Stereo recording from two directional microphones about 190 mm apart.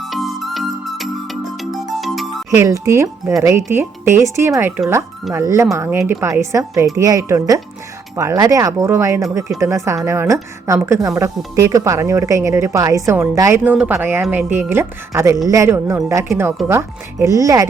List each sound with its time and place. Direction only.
0.0 s music: centre (ahead or behind)
2.6 s speech: 15° right (ahead or behind)